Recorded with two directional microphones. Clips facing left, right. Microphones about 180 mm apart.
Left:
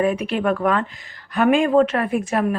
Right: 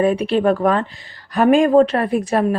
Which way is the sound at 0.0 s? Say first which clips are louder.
Right 4 dB; 35° right (ahead or behind).